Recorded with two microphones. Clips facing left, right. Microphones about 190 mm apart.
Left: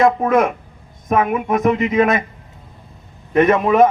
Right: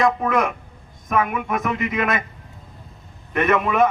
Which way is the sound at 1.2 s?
35° left (ahead or behind).